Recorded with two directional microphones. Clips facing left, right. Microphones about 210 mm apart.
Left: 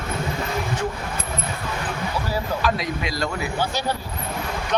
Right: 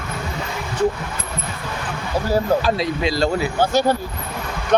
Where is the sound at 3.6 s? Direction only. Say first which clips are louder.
Right 9 dB; 45° right (ahead or behind).